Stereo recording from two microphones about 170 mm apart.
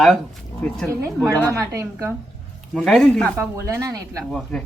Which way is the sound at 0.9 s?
15° right (ahead or behind).